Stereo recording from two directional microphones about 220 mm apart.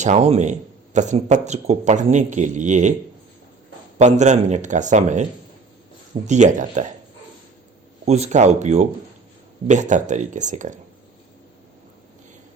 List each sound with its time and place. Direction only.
0.0 s a man's voice: 30° right (ahead or behind)
3.9 s a man's voice: 30° right (ahead or behind)
6.2 s a man's voice: 30° right (ahead or behind)
8.0 s a man's voice: 30° right (ahead or behind)